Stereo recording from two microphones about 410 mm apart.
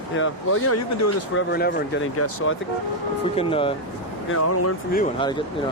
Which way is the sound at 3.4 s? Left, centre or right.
Centre.